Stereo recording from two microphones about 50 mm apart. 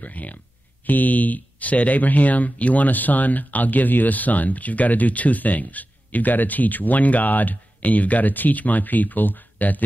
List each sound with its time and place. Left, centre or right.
0.0 s speech: left